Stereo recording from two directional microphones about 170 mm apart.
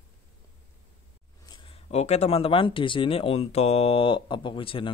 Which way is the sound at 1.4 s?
25° left (ahead or behind).